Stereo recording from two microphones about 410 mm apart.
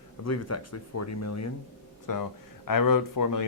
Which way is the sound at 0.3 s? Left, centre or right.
Left.